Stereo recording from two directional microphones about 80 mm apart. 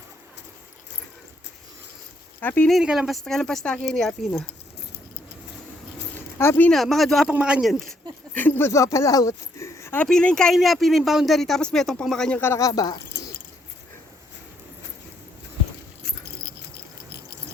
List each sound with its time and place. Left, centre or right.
2.4 s speech: left
2.8 s speech: centre
6.4 s speech: left
6.7 s speech: centre
7.3 s speech: centre
7.6 s speech: centre
8.3 s speech: left
10.0 s speech: centre
12.5 s speech: left